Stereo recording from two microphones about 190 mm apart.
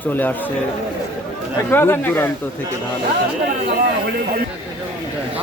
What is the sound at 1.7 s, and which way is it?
Speech, 10° left (ahead or behind).